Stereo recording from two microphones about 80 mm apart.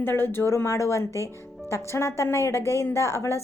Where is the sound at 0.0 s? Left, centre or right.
Left.